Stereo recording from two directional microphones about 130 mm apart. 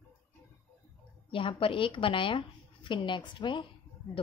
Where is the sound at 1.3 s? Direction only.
40° left (ahead or behind).